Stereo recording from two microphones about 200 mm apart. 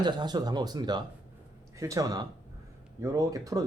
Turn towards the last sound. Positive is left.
turn(degrees=-15)  # may be behind; listen again after turning